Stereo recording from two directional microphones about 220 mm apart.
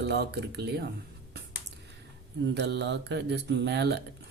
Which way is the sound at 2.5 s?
50° right (ahead or behind).